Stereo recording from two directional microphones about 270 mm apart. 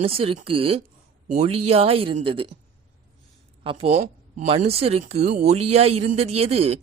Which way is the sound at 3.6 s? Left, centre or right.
Centre.